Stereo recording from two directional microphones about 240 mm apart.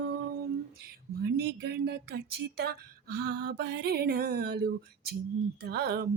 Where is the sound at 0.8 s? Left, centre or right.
Right.